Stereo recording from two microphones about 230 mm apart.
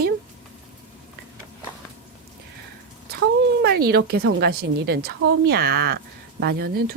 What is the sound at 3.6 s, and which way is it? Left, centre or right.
Speech, right.